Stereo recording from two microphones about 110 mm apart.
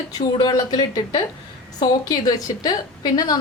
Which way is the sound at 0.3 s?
40° left (ahead or behind).